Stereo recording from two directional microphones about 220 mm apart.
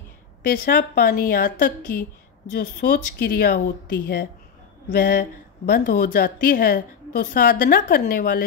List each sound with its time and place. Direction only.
0.5 s a woman's voice: 45° left (ahead or behind)